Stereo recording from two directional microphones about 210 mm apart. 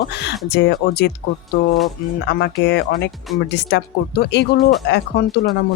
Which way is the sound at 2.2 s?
50° left (ahead or behind).